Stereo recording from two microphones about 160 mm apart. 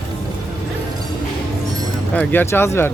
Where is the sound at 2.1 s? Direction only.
10° left (ahead or behind).